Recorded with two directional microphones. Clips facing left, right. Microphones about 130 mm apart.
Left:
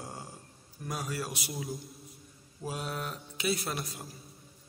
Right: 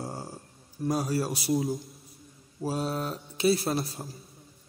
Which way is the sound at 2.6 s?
35° right (ahead or behind).